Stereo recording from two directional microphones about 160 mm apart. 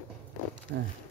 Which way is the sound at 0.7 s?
75° right (ahead or behind).